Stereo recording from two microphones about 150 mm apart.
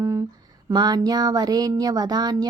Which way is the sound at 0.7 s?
30° right (ahead or behind).